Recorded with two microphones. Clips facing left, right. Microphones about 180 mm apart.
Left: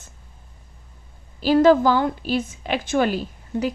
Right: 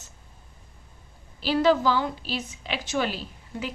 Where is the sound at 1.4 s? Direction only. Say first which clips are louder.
Left 7 dB; 45° left (ahead or behind).